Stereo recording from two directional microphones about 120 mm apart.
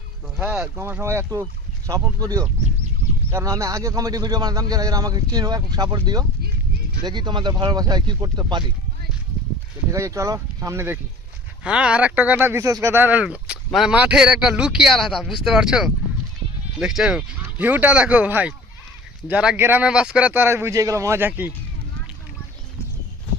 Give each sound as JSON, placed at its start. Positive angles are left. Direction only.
{"t": 0.3, "sound": "speech", "side_deg": -10}
{"t": 9.9, "sound": "speech", "side_deg": -25}
{"t": 11.6, "sound": "a man's voice", "side_deg": -10}
{"t": 19.5, "sound": "speech", "side_deg": -20}